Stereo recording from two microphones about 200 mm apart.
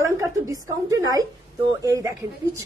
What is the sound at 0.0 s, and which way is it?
A woman's voice, 15° right (ahead or behind).